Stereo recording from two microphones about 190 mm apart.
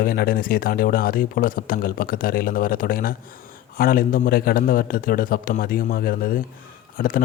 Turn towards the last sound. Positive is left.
turn(degrees=45)  # may be behind; listen again after turning